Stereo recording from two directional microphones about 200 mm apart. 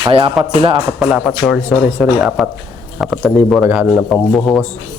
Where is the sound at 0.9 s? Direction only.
Centre (ahead or behind).